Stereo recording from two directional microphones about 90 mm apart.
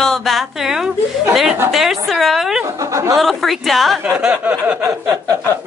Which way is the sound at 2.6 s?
35° right (ahead or behind).